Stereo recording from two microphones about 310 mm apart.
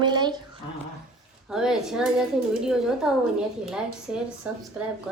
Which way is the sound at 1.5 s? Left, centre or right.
Centre.